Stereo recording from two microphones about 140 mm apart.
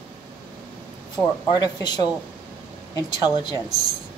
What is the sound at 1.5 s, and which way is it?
A woman's voice, 30° left (ahead or behind).